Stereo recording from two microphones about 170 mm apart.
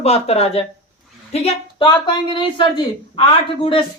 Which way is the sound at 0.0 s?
35° left (ahead or behind).